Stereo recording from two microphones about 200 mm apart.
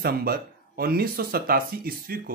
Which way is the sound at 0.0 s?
50° right (ahead or behind).